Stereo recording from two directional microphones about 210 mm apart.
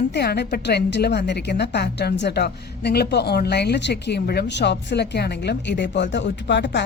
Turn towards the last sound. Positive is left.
turn(degrees=55)  # may be behind; listen again after turning